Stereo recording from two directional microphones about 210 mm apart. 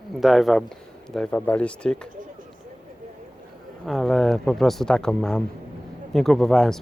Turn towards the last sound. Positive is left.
turn(degrees=0)  # may be behind; listen again after turning